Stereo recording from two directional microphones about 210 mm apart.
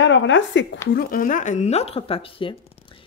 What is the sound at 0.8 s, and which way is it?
Speech, 45° left (ahead or behind).